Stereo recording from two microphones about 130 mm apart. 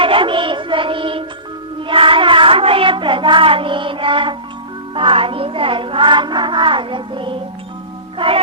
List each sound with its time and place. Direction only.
0.0 s music: 40° right (ahead or behind)
1.9 s child singing: 40° right (ahead or behind)
4.9 s music: 45° right (ahead or behind)